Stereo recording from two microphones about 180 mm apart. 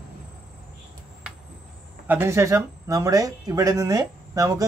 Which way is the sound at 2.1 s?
15° right (ahead or behind).